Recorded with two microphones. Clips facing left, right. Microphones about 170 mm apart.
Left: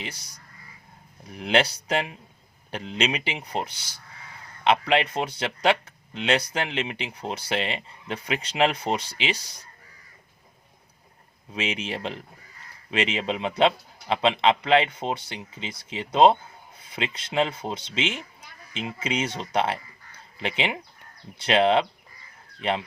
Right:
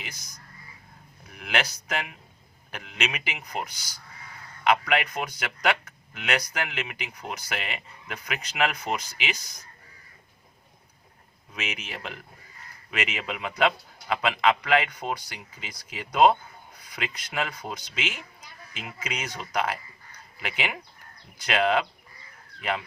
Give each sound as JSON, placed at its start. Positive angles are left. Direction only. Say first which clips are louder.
{"t": 0.0, "sound": "a man's voice", "louder": "left 6 dB", "side_deg": 30}
{"t": 11.5, "sound": "a man's voice", "louder": "left 7 dB", "side_deg": 30}